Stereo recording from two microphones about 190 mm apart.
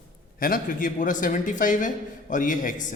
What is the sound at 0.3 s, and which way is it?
A man's voice, 50° left (ahead or behind).